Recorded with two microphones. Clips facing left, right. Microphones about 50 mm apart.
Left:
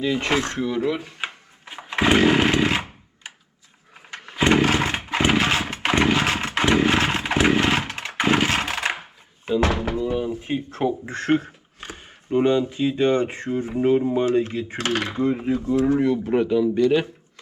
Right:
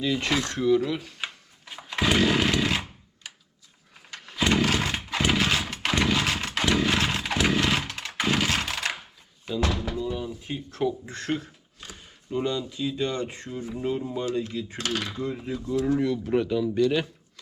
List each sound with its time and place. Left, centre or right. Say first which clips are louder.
0.0 s speech: left 3 dB; centre
0.3 s speech: left 4 dB; left
0.6 s chainsaw: right 1 dB; left
9.5 s speech: left 7 dB; left
16.0 s speech: left 4 dB; left